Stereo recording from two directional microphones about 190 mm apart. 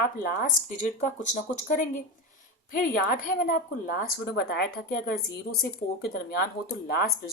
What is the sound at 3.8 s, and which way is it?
Speech, 50° left (ahead or behind).